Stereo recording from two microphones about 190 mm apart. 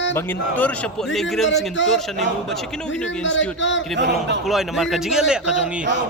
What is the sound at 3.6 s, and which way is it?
Speech, 75° left (ahead or behind).